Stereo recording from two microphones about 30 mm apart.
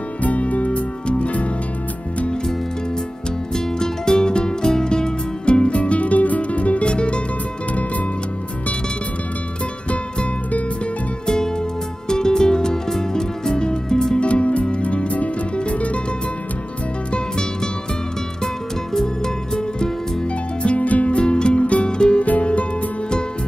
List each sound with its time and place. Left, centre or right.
0.2 s music: left
3.5 s music: centre; by 6.9 s left
6.9 s music: left
11.2 s music: left
14.1 s music: left
18.9 s music: centre
20.6 s music: left
21.8 s music: left
22.4 s music: left